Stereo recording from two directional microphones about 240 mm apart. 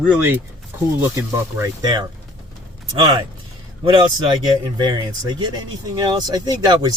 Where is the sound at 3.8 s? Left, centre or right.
Centre.